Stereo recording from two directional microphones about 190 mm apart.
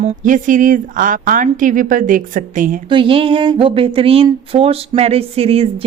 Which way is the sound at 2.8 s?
25° right (ahead or behind).